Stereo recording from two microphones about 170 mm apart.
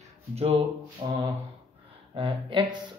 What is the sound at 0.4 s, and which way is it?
Speech, 35° right (ahead or behind).